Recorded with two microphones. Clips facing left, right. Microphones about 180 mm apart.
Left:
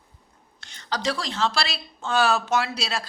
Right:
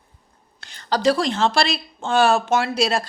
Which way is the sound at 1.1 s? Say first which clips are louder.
Right 6 dB; 55° right (ahead or behind).